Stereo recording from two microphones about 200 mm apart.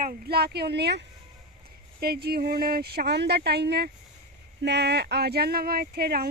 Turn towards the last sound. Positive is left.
turn(degrees=-50)  # may be behind; listen again after turning